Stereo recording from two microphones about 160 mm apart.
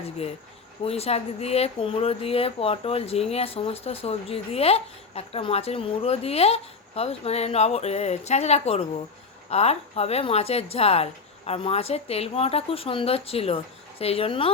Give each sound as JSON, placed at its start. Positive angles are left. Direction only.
{"t": 0.9, "sound": "speech", "side_deg": 40}